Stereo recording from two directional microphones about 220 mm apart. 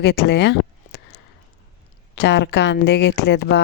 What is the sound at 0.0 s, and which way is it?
Speech, 50° left (ahead or behind).